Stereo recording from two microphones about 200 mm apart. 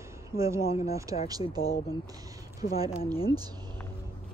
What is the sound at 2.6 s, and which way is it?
Speech, 40° left (ahead or behind).